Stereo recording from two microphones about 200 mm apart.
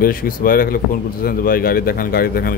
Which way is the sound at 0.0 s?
45° left (ahead or behind).